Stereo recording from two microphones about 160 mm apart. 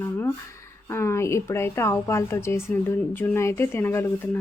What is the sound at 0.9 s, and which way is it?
Speech, 15° left (ahead or behind).